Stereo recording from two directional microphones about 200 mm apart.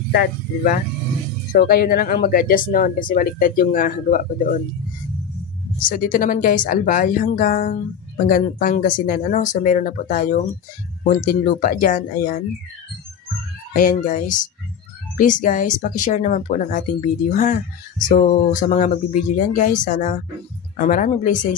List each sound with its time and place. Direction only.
0.1 s speech: 45° left (ahead or behind)
5.8 s speech: 45° left (ahead or behind)
13.7 s speech: 45° left (ahead or behind)